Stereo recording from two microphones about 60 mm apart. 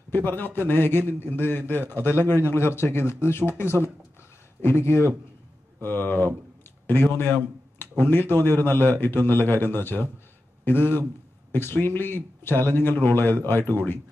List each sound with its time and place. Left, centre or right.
0.1 s speech: left
5.9 s speech: left